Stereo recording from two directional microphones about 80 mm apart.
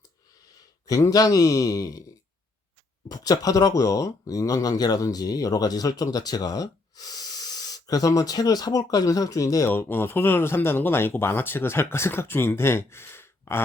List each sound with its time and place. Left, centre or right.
1.1 s speech: left
3.1 s speech: left
9.6 s speech: left